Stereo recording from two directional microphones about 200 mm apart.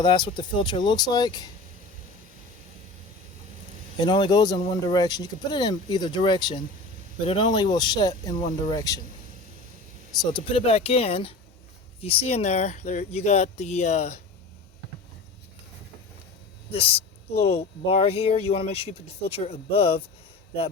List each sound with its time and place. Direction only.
0.0 s speech: 25° left (ahead or behind)
4.0 s speech: 20° left (ahead or behind)
10.3 s speech: 25° left (ahead or behind)
16.7 s speech: 30° left (ahead or behind)